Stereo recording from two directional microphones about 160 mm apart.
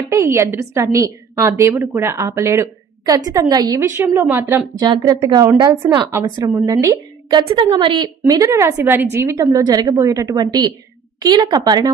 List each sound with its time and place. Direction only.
0.1 s a woman's voice: 15° right (ahead or behind)
4.8 s a woman's voice: 25° right (ahead or behind)